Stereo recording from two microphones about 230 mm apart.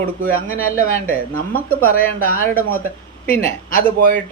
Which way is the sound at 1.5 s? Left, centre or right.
Centre.